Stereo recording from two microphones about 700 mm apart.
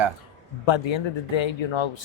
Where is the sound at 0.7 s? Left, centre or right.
Left.